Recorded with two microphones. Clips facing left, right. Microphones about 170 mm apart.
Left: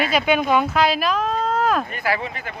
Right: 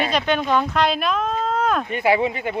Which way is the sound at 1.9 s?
25° right (ahead or behind).